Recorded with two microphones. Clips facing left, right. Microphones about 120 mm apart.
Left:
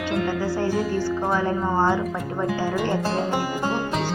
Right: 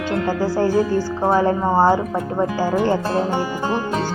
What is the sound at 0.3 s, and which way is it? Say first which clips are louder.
A woman's voice: right 5 dB; 35° right (ahead or behind).